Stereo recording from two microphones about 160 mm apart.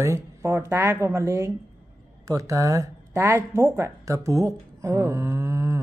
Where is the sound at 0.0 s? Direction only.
15° right (ahead or behind).